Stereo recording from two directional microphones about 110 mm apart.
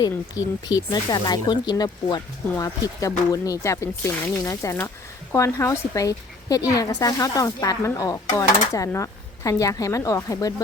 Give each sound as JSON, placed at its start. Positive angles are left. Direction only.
{"t": 0.0, "sound": "a woman's voice", "side_deg": 35}